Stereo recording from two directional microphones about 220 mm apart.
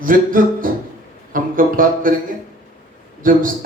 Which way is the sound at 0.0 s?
40° right (ahead or behind).